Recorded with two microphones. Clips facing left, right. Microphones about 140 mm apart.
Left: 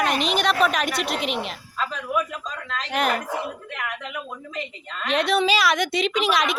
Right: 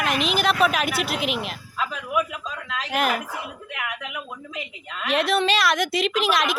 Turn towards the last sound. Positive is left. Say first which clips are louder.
# even
turn(degrees=0)  # may be behind; listen again after turning